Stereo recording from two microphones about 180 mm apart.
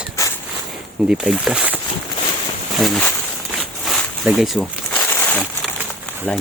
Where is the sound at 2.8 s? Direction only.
Centre (ahead or behind).